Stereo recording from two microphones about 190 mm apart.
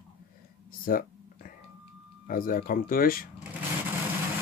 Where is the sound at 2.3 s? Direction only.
50° left (ahead or behind).